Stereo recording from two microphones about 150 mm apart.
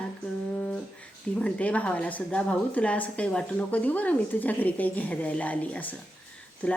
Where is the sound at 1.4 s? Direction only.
10° left (ahead or behind).